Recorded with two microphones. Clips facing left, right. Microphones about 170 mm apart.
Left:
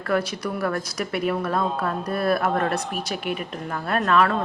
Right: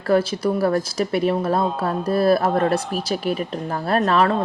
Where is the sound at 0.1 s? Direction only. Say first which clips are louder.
Right 6 dB; 30° right (ahead or behind).